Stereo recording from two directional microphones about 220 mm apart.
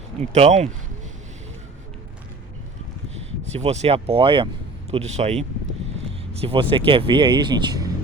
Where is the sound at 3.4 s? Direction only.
30° right (ahead or behind).